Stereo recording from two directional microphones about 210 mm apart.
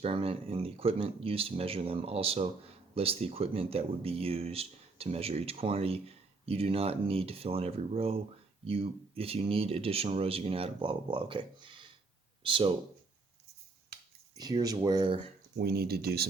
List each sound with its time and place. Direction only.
0.0 s speech: 25° right (ahead or behind)
14.3 s speech: 20° right (ahead or behind)
15.5 s speech: 45° right (ahead or behind)